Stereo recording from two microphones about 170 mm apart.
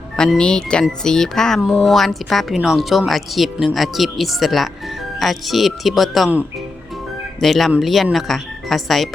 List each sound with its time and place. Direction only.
0.2 s speech: 5° left (ahead or behind)
7.4 s speech: centre (ahead or behind)